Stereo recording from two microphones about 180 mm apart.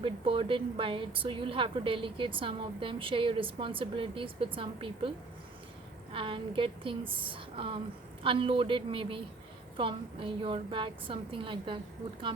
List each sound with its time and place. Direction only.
0.0 s a woman's voice: 30° right (ahead or behind)
6.1 s a woman's voice: 30° right (ahead or behind)